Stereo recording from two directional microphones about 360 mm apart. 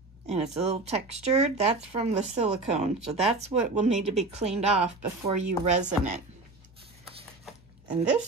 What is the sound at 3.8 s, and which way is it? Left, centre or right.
Speech, centre.